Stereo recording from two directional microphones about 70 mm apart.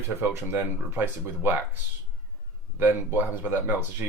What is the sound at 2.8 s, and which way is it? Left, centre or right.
Speech, right.